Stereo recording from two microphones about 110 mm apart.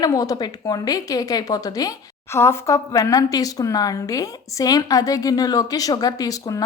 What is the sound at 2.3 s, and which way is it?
A woman's voice, 25° left (ahead or behind).